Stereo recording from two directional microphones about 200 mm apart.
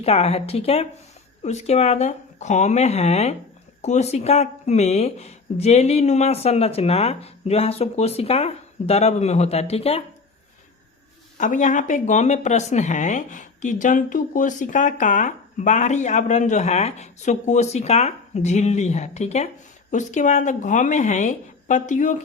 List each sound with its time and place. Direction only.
0.0 s speech: 30° left (ahead or behind)
11.3 s speech: 40° left (ahead or behind)